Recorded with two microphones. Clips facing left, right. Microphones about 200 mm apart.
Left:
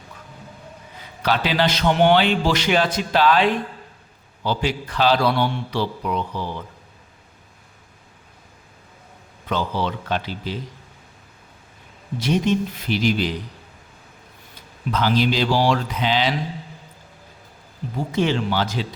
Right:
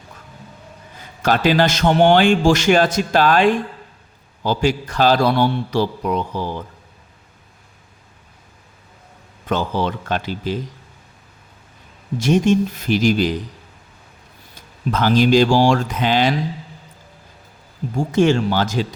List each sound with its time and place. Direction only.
1.2 s a man's voice: 45° right (ahead or behind)
9.5 s a man's voice: 50° right (ahead or behind)
12.2 s a man's voice: 45° right (ahead or behind)
14.8 s a man's voice: 45° right (ahead or behind)
17.9 s a man's voice: 45° right (ahead or behind)